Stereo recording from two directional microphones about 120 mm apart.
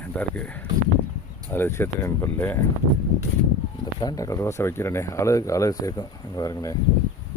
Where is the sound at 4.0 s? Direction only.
30° left (ahead or behind).